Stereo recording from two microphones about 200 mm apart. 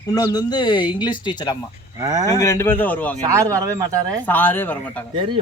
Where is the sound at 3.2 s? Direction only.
15° right (ahead or behind).